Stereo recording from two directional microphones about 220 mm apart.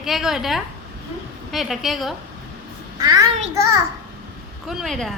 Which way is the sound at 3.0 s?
15° right (ahead or behind).